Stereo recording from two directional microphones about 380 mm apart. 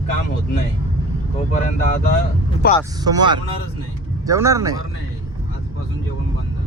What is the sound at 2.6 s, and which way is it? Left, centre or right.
Speech, left.